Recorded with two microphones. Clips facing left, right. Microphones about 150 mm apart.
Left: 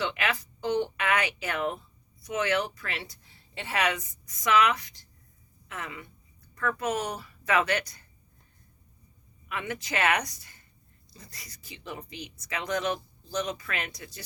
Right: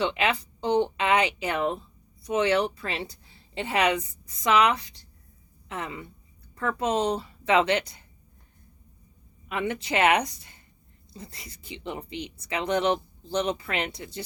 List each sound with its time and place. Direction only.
0.0 s speech: 25° right (ahead or behind)
9.5 s speech: 25° right (ahead or behind)